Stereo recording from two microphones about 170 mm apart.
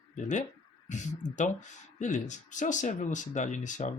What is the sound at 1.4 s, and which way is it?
Speech, 45° left (ahead or behind).